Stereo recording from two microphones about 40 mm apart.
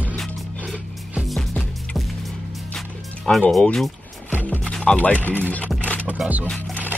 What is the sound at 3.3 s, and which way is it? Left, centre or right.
Speech, left.